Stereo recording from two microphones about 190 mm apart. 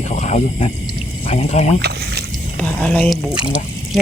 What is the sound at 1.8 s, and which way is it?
Speech, 60° right (ahead or behind).